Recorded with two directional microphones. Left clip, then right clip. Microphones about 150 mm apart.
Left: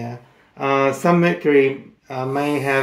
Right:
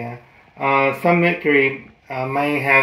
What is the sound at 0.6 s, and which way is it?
Speech, 20° left (ahead or behind).